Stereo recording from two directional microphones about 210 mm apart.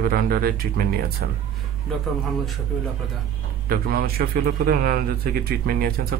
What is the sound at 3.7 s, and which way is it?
A man's voice, 45° right (ahead or behind).